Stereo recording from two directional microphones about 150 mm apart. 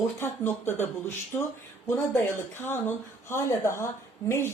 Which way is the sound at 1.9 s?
15° left (ahead or behind).